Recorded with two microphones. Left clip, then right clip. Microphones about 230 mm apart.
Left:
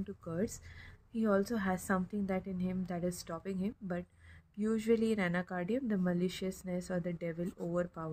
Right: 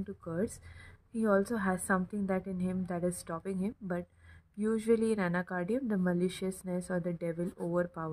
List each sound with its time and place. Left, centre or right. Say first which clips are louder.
0.0 s a woman's voice: right 2 dB; centre